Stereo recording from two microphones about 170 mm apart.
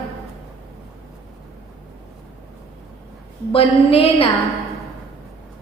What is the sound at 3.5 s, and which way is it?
Speech, 35° left (ahead or behind).